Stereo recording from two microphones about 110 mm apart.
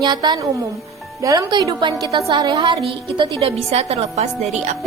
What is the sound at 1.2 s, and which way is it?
A woman's voice, 30° right (ahead or behind).